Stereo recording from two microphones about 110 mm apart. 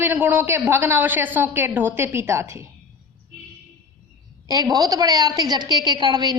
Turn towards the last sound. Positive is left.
turn(degrees=-40)  # may be behind; listen again after turning